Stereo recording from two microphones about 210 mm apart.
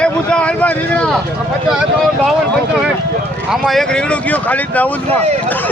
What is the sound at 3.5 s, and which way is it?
Speech, centre (ahead or behind).